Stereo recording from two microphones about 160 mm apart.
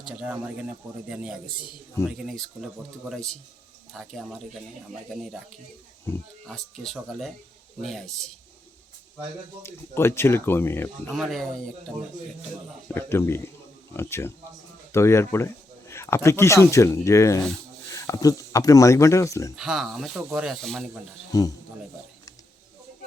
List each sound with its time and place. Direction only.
0.2 s speech: 10° right (ahead or behind)
3.9 s speech: centre (ahead or behind)
6.5 s speech: centre (ahead or behind)
9.6 s speech: 15° left (ahead or behind)
11.1 s speech: centre (ahead or behind)
12.9 s speech: 15° left (ahead or behind)
19.5 s speech: centre (ahead or behind)
21.3 s speech: 20° left (ahead or behind)